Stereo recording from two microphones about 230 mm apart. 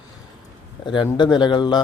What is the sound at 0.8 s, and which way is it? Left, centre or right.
A man's voice, centre.